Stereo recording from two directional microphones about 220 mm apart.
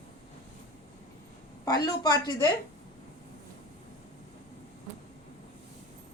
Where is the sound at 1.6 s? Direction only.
15° left (ahead or behind).